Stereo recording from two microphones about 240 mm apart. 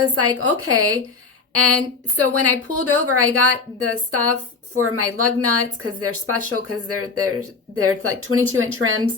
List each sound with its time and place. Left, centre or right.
0.1 s speech: centre
0.6 s a woman's voice: right